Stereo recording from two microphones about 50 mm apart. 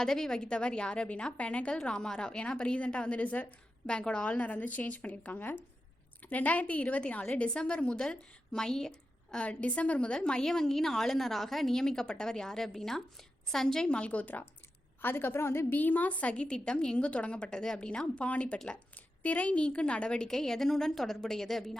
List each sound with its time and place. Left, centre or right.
0.0 s a woman's voice: centre
14.0 s a woman's voice: left
15.0 s a woman's voice: left
15.7 s a woman's voice: left; by 21.8 s centre